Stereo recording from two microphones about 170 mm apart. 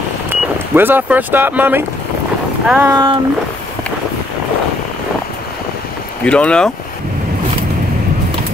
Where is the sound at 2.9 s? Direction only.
25° right (ahead or behind).